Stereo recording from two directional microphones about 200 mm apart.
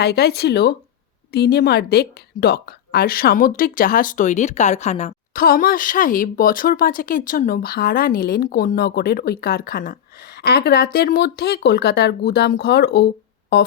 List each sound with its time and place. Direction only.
0.0 s a woman's voice: 55° left (ahead or behind)